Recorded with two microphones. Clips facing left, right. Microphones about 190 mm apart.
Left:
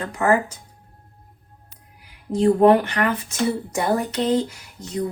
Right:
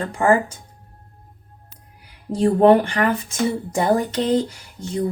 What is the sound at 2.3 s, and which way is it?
Speech, 35° right (ahead or behind).